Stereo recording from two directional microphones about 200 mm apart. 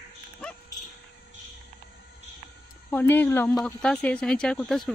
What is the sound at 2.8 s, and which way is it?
Speech, 10° left (ahead or behind).